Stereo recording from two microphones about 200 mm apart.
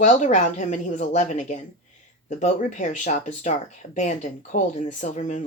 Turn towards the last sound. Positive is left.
turn(degrees=35)  # may be behind; listen again after turning